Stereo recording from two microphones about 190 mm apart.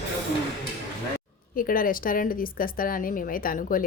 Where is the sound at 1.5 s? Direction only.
50° left (ahead or behind).